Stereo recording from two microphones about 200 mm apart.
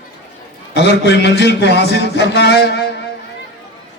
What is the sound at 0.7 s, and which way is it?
A man's voice, 55° left (ahead or behind).